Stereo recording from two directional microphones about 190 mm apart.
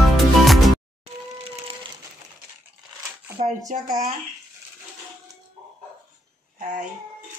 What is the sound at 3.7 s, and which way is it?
Speech, 40° right (ahead or behind).